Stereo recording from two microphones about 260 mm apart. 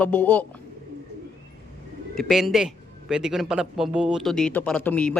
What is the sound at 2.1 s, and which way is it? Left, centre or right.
A man's voice, centre.